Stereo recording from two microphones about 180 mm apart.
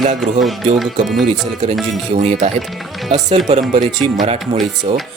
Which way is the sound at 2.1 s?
40° right (ahead or behind).